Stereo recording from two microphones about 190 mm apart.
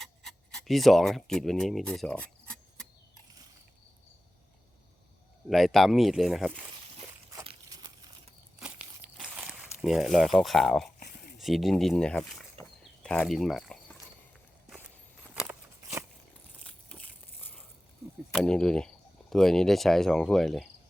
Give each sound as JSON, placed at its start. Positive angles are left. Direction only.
{"t": 0.0, "sound": "speech", "side_deg": 0}
{"t": 5.5, "sound": "speech", "side_deg": 0}
{"t": 7.4, "sound": "crumpling", "side_deg": -20}
{"t": 8.5, "sound": "crumpling", "side_deg": -5}
{"t": 11.0, "sound": "a sound", "side_deg": 60}
{"t": 11.3, "sound": "speech", "side_deg": 0}
{"t": 15.4, "sound": "a sound", "side_deg": -15}
{"t": 16.6, "sound": "crushing", "side_deg": 5}
{"t": 18.3, "sound": "speech", "side_deg": 5}